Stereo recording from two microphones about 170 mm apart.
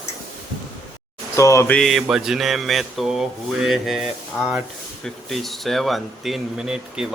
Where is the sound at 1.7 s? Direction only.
Centre (ahead or behind).